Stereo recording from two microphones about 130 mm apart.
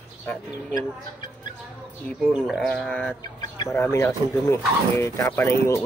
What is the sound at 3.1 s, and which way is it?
Chicken, 35° left (ahead or behind).